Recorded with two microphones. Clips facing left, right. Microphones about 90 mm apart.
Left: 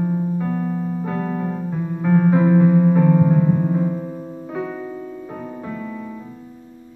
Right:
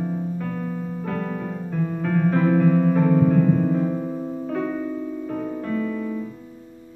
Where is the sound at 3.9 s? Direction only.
5° right (ahead or behind).